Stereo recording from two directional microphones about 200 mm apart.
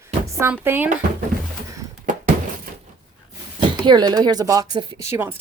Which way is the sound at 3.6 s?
20° right (ahead or behind).